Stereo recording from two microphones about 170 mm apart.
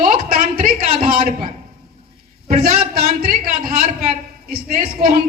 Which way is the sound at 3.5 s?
40° right (ahead or behind).